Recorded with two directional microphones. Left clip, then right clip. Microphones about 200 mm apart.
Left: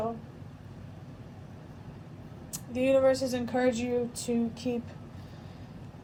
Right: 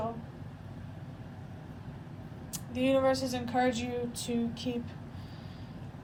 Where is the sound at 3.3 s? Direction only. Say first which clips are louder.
Left 2 dB; 30° left (ahead or behind).